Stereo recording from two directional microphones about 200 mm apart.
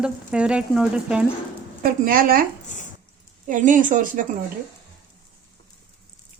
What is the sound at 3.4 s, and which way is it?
Speech, 40° right (ahead or behind).